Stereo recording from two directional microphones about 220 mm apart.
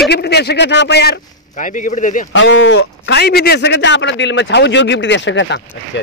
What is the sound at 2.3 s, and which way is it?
A man's voice, 55° left (ahead or behind).